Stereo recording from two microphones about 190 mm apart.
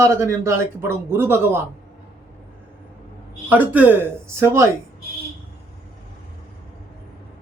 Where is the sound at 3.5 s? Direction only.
10° right (ahead or behind).